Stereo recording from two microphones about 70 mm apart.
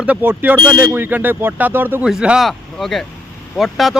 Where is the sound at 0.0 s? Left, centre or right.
Centre.